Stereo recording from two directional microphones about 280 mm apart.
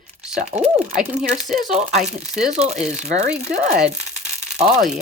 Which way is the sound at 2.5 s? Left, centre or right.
Right.